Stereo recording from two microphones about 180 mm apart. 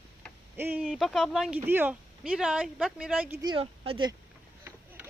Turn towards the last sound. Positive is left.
turn(degrees=-30)  # may be behind; listen again after turning